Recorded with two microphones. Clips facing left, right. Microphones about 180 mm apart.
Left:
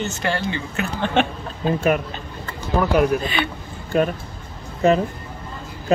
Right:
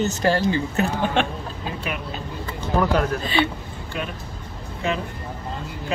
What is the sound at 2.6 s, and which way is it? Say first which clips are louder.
Speech: left 3 dB; 10° left (ahead or behind).